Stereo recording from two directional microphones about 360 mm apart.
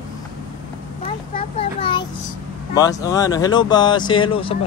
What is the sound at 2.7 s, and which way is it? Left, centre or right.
Speech, centre.